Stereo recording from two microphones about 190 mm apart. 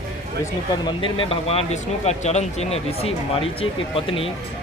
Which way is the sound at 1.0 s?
30° left (ahead or behind).